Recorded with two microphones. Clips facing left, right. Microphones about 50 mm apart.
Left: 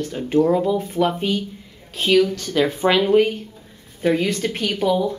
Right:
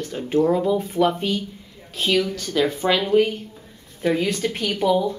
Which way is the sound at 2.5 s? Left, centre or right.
Centre.